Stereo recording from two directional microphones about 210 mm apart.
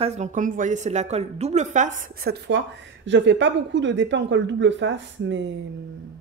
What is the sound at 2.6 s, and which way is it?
Speech, 55° right (ahead or behind).